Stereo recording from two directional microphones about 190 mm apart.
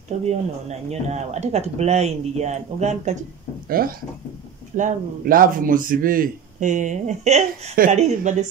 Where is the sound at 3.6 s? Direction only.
50° right (ahead or behind).